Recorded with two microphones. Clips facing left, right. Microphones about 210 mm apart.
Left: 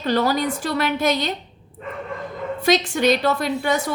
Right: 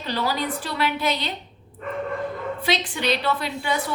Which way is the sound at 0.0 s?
45° left (ahead or behind).